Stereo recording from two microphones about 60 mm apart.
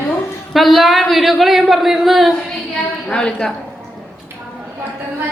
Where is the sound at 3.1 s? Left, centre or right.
Centre.